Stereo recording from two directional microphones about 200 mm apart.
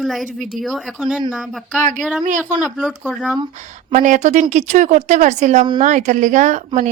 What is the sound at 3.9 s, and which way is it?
Speech, 40° right (ahead or behind).